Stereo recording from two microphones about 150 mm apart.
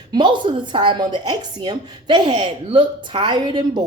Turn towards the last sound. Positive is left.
turn(degrees=-30)  # may be behind; listen again after turning